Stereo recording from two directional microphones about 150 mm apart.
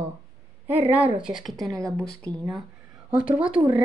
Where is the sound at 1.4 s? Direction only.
Centre (ahead or behind).